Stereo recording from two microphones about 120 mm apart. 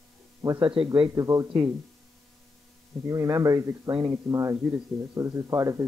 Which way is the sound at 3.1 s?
30° right (ahead or behind).